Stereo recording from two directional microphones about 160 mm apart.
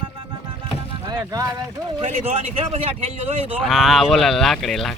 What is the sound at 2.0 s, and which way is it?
Speech, 40° right (ahead or behind).